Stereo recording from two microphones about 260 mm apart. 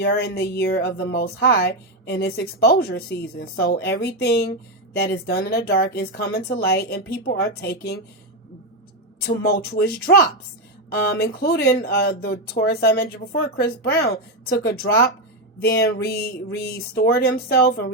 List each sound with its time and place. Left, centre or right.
0.0 s speech: left
9.2 s speech: left